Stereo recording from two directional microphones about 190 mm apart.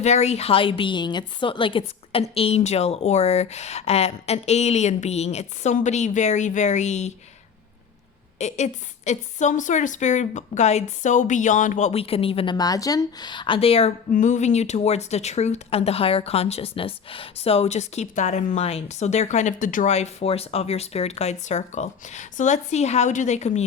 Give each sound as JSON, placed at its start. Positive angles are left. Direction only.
{"t": 0.0, "sound": "speech", "side_deg": 35}
{"t": 8.4, "sound": "speech", "side_deg": 35}